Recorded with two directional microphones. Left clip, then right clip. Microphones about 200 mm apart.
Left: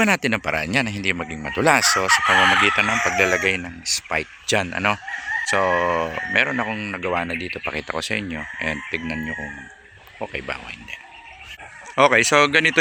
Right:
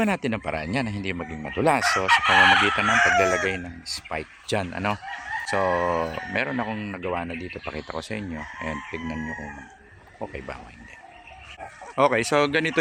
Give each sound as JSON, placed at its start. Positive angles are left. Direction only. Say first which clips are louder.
{"t": 0.0, "sound": "speech", "louder": "left 6 dB", "side_deg": 0}
{"t": 2.0, "sound": "chicken", "louder": "right 1 dB", "side_deg": -15}
{"t": 2.7, "sound": "speech", "louder": "even", "side_deg": -5}